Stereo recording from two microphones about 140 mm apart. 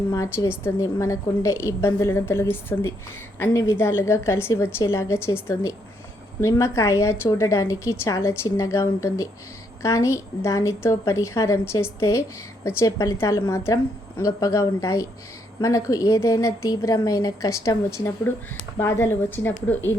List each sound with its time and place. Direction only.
0.1 s a woman's voice: 20° left (ahead or behind)